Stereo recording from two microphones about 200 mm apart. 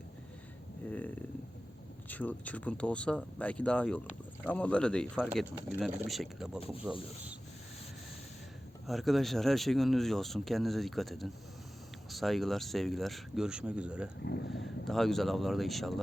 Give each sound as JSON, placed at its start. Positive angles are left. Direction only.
{"t": 0.9, "sound": "a sound", "side_deg": 10}
{"t": 2.0, "sound": "speech", "side_deg": 10}
{"t": 8.9, "sound": "speech", "side_deg": 0}
{"t": 14.3, "sound": "speech", "side_deg": 60}
{"t": 14.8, "sound": "speech", "side_deg": 0}